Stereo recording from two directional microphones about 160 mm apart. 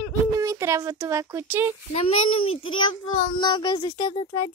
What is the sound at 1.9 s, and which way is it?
A child's voice, 35° left (ahead or behind).